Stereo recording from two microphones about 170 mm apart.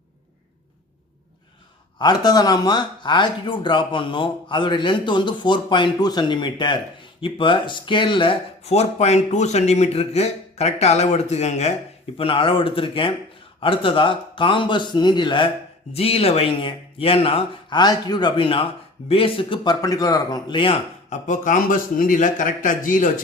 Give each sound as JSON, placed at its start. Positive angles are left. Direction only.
{"t": 2.0, "sound": "speech", "side_deg": 25}
{"t": 21.1, "sound": "a man's voice", "side_deg": 50}